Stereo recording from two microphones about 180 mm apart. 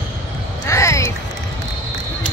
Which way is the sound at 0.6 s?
15° left (ahead or behind).